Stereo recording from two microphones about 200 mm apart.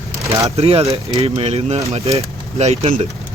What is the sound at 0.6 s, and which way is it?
Speech, 30° right (ahead or behind).